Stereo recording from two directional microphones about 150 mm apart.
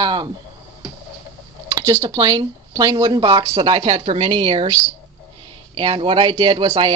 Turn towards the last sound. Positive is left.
turn(degrees=-35)  # may be behind; listen again after turning